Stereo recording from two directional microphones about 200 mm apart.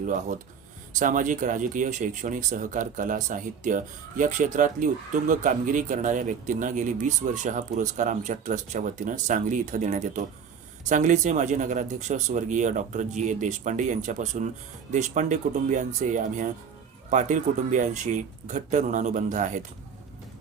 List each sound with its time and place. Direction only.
0.0 s speech: 40° right (ahead or behind)